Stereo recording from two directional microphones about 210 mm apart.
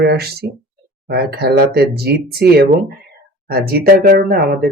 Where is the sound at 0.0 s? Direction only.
50° right (ahead or behind).